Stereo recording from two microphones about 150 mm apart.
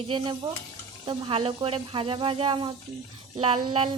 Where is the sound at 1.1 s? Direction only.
35° right (ahead or behind).